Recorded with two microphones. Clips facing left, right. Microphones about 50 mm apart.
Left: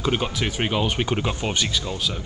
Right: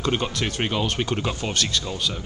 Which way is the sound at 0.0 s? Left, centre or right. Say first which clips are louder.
Left 1 dB; centre.